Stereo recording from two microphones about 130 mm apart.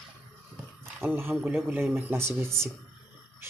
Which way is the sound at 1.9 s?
20° right (ahead or behind).